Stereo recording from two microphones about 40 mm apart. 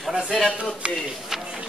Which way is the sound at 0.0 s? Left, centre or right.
Centre.